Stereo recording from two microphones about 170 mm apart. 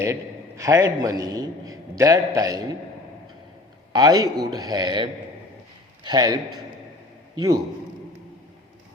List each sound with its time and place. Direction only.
0.0 s a man's voice: 15° right (ahead or behind)
3.9 s a man's voice: 25° right (ahead or behind)